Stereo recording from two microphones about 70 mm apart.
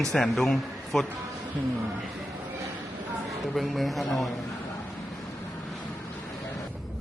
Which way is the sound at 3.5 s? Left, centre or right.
Centre.